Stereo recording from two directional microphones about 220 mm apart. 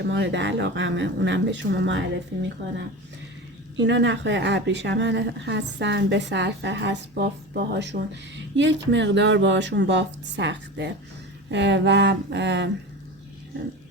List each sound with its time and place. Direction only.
0.1 s speech: 55° right (ahead or behind)
3.8 s speech: 55° right (ahead or behind)